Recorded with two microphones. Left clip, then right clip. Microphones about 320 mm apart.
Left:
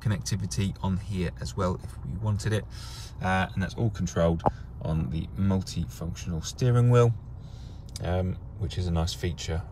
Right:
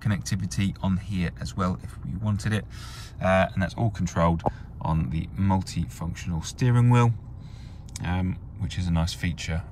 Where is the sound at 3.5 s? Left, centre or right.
Centre.